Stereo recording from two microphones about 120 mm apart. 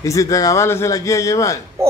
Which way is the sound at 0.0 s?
25° left (ahead or behind).